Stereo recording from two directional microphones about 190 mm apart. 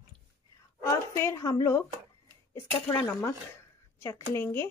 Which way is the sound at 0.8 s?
15° left (ahead or behind).